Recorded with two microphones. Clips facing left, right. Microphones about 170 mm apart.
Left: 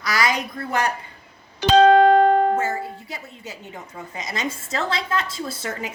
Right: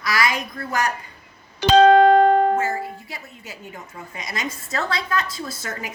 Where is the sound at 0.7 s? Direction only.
30° left (ahead or behind).